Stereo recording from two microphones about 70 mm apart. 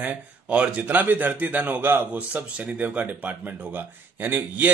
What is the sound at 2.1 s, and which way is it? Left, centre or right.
Speech, right.